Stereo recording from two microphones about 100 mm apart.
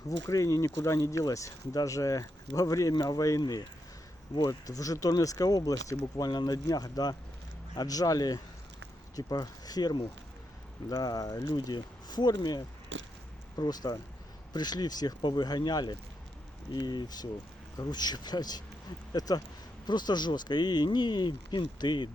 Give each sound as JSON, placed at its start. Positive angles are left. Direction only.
{"t": 0.3, "sound": "speech", "side_deg": 30}